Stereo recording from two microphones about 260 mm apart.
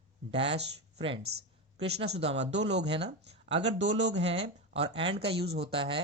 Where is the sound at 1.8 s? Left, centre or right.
Right.